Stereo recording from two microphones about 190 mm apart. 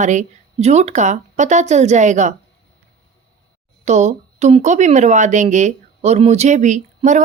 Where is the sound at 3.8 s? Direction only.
35° right (ahead or behind).